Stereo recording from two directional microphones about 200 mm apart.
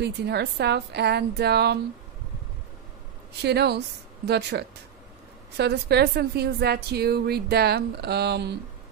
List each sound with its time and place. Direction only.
0.0 s a woman's voice: 55° right (ahead or behind)
3.4 s a woman's voice: 55° right (ahead or behind)